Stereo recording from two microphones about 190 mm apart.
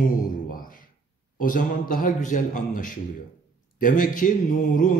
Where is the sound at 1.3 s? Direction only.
45° left (ahead or behind).